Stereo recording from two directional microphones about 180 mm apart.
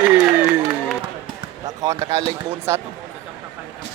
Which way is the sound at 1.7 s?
20° right (ahead or behind).